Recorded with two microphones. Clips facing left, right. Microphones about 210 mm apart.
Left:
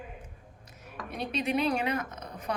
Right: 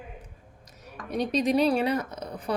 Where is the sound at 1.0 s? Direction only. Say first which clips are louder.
Right 7 dB; 40° right (ahead or behind).